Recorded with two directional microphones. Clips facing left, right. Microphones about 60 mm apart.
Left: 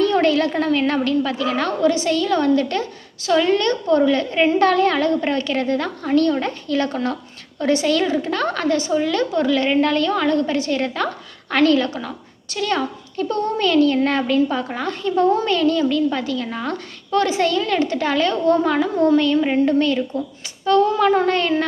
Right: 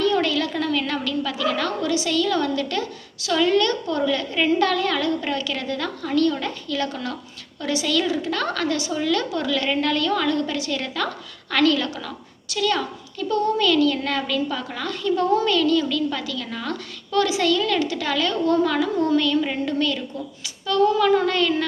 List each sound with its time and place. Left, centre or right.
0.0 s a woman's voice: left